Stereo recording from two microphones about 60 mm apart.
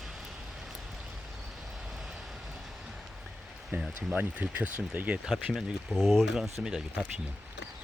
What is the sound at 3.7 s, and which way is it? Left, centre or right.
Speech, right.